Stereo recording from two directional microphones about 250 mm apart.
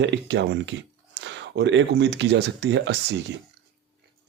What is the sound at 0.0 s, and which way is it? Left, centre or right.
Speech, right.